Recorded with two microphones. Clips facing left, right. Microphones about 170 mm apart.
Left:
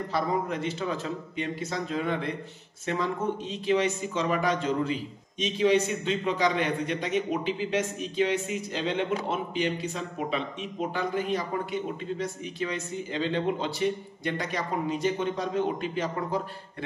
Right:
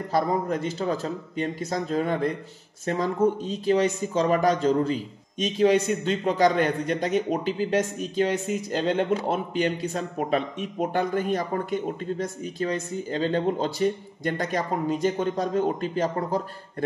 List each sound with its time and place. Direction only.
0.1 s a man's voice: 40° right (ahead or behind)